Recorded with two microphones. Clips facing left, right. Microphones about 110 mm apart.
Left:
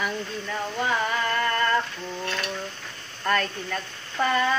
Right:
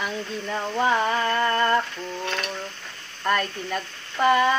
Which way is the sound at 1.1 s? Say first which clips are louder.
Right 3 dB; 25° right (ahead or behind).